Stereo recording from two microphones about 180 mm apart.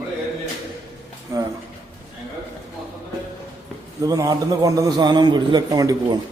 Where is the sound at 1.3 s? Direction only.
15° right (ahead or behind).